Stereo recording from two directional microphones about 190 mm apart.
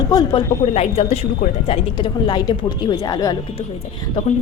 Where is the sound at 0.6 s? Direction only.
35° left (ahead or behind); by 3.3 s 20° left (ahead or behind).